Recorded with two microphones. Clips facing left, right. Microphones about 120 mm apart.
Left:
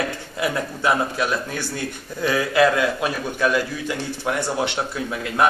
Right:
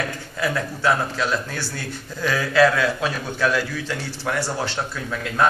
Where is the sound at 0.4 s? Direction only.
15° left (ahead or behind).